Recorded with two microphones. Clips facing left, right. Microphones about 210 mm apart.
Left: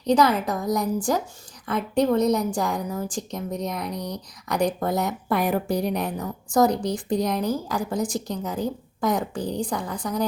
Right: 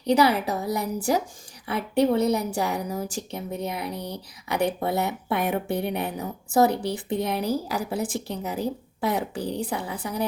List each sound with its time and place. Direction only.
0.0 s speech: 10° right (ahead or behind)
3.9 s speech: 30° right (ahead or behind)
4.4 s speech: 5° right (ahead or behind)